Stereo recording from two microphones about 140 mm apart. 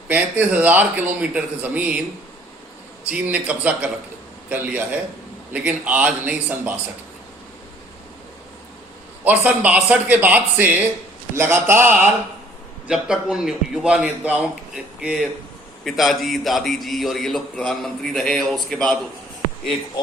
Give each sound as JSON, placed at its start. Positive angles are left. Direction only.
{"t": 0.1, "sound": "a man's voice", "side_deg": -10}
{"t": 3.1, "sound": "a man's voice", "side_deg": -10}
{"t": 9.2, "sound": "a man's voice", "side_deg": -10}